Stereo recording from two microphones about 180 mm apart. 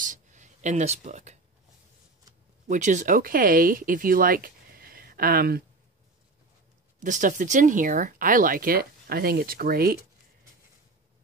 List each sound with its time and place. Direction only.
0.0 s a sound: 45° right (ahead or behind)
2.7 s speech: 45° right (ahead or behind)
7.0 s speech: 45° right (ahead or behind)